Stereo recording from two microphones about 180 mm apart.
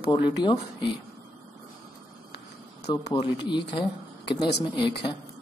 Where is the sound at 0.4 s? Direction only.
25° left (ahead or behind).